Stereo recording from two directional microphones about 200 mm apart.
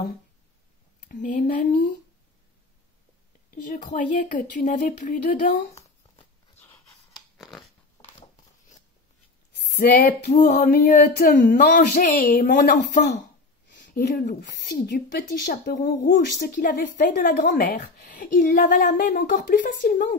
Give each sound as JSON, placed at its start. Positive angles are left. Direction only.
{"t": 1.0, "sound": "speech", "side_deg": 40}
{"t": 3.7, "sound": "speech", "side_deg": 40}
{"t": 8.0, "sound": "a sound", "side_deg": 35}
{"t": 9.8, "sound": "a woman's voice", "side_deg": 45}
{"t": 13.7, "sound": "a sound", "side_deg": 60}
{"t": 13.9, "sound": "a woman's voice", "side_deg": 45}